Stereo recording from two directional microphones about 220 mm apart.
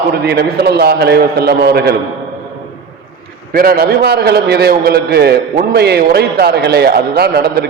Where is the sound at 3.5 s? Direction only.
40° right (ahead or behind).